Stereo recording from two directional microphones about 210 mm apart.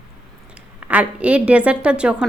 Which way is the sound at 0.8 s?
5° right (ahead or behind).